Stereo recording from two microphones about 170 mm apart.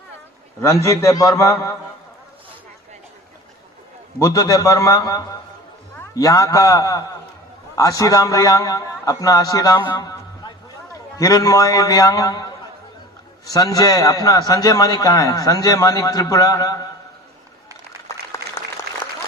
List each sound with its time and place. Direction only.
0.6 s a man's voice: 15° left (ahead or behind)
4.2 s a man's voice: 20° left (ahead or behind)
18.3 s applause: 15° left (ahead or behind)